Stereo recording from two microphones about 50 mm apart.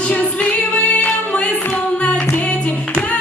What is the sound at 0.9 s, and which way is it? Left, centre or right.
Singing, left.